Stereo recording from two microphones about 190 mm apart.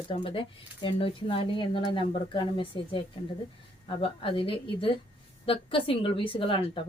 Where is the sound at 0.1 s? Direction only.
30° left (ahead or behind).